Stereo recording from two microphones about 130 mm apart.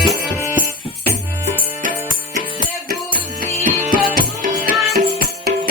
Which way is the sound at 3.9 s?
90° right.